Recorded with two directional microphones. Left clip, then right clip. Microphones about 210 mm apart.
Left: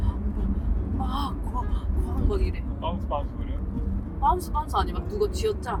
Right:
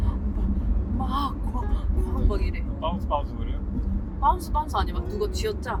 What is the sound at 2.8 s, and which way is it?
Speech, 5° right (ahead or behind).